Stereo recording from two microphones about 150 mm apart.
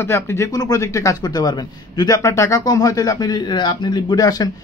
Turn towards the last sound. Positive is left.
turn(degrees=25)  # may be behind; listen again after turning